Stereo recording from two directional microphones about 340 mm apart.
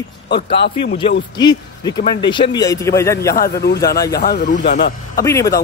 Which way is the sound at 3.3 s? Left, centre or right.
Left.